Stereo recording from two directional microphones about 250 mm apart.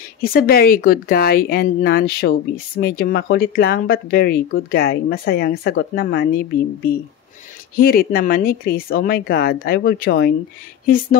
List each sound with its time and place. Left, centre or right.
0.2 s speech: left
7.7 s speech: left